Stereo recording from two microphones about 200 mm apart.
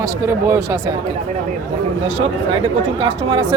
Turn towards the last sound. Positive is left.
turn(degrees=-25)  # may be behind; listen again after turning